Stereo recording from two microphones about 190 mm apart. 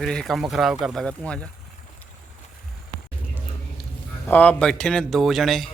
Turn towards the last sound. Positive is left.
turn(degrees=0)  # may be behind; listen again after turning